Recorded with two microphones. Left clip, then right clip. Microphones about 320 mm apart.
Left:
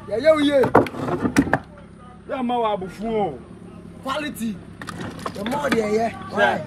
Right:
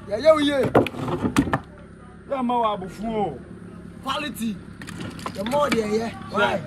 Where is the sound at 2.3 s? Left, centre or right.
Centre.